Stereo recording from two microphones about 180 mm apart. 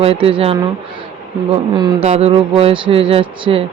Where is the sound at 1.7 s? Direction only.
30° right (ahead or behind).